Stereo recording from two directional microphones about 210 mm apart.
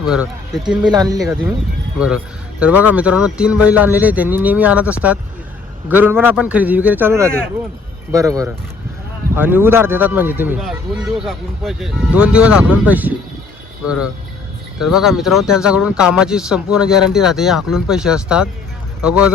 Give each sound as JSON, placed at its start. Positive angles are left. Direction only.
{"t": 0.0, "sound": "speech", "side_deg": -5}
{"t": 0.9, "sound": "speech", "side_deg": -15}
{"t": 2.0, "sound": "speech", "side_deg": -5}
{"t": 14.8, "sound": "speech", "side_deg": 0}